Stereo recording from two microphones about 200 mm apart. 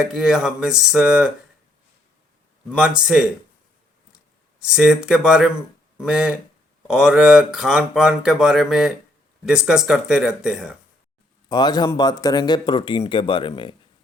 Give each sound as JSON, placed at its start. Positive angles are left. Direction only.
{"t": 0.0, "sound": "speech", "side_deg": 0}
{"t": 4.6, "sound": "speech", "side_deg": -5}
{"t": 11.4, "sound": "speech", "side_deg": 20}